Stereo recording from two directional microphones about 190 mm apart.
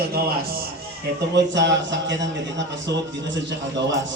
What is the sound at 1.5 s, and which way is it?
Speech, 70° right (ahead or behind).